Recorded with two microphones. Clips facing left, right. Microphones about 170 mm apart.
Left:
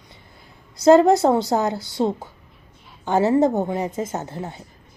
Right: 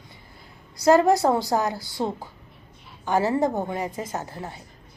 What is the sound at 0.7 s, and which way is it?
A woman's voice, 25° left (ahead or behind).